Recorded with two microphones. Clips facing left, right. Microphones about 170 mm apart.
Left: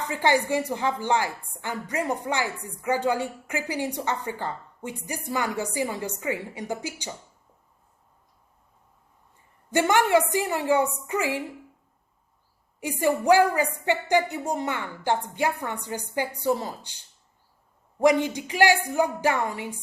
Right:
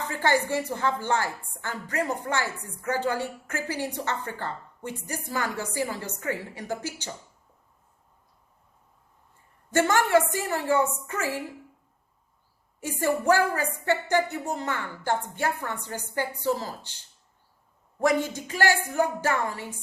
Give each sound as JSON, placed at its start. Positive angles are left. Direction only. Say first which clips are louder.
{"t": 0.1, "sound": "a woman's voice", "louder": "left 2 dB", "side_deg": 15}
{"t": 9.7, "sound": "a woman's voice", "louder": "left 1 dB", "side_deg": 15}
{"t": 12.8, "sound": "a woman's voice", "louder": "left 2 dB", "side_deg": 15}
{"t": 18.0, "sound": "a woman's voice", "louder": "left 4 dB", "side_deg": 15}